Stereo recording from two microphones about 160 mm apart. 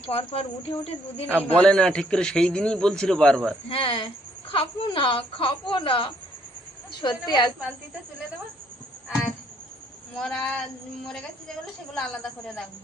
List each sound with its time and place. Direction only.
0.1 s speech: 40° left (ahead or behind)
1.5 s speech: 5° left (ahead or behind)
3.7 s a woman's voice: 35° left (ahead or behind)
10.2 s speech: 5° left (ahead or behind)